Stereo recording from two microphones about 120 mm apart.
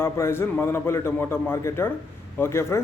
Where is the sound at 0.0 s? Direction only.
20° left (ahead or behind).